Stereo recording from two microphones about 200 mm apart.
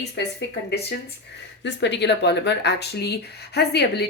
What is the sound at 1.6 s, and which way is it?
Speech, 60° left (ahead or behind).